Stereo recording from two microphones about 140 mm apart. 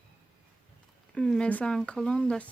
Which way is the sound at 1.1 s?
5° left (ahead or behind).